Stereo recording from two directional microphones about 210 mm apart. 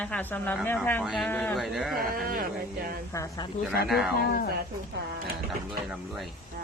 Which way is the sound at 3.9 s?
Centre (ahead or behind).